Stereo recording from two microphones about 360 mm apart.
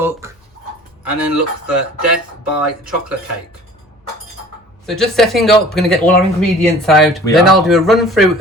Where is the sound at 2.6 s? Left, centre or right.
Centre.